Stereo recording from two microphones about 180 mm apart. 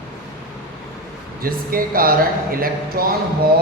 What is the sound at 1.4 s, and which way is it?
Speech, 55° right (ahead or behind).